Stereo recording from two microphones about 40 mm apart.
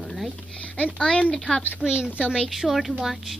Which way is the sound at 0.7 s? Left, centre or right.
Right.